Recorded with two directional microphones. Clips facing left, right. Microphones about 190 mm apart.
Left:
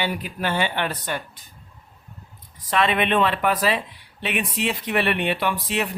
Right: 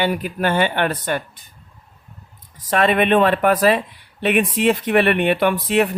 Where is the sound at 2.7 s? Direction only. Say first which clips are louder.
Right 5 dB; 45° right (ahead or behind).